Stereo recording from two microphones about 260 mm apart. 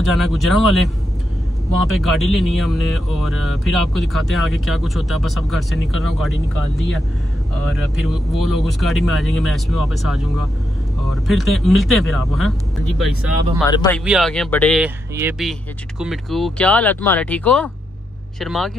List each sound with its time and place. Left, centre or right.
0.1 s speech: centre
13.7 s speech: centre
13.9 s speech: centre